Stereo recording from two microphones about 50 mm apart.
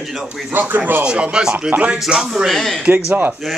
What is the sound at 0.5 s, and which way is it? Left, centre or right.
Speech, right.